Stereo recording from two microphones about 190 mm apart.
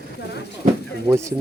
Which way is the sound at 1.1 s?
15° right (ahead or behind).